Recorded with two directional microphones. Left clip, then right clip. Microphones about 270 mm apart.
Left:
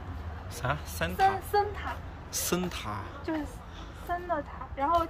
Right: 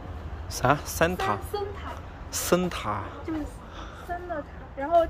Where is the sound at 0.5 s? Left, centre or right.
Centre.